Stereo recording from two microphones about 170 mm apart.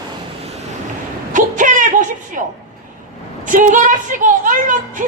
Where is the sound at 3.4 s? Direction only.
50° right (ahead or behind).